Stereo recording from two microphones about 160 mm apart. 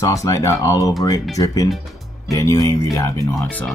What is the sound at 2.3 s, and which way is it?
Speech, 20° left (ahead or behind).